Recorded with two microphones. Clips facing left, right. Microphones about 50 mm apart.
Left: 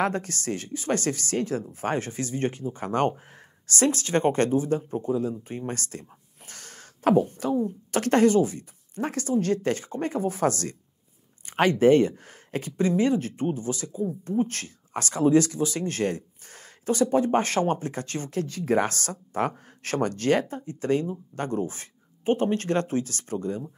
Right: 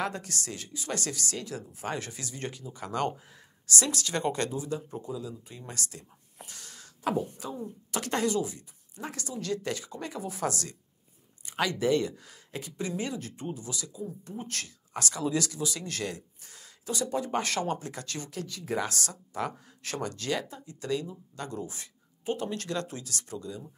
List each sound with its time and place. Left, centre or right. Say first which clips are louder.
0.0 s speech: left 7 dB; left